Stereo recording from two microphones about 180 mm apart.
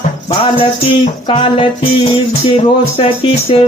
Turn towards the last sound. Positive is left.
turn(degrees=30)  # may be behind; listen again after turning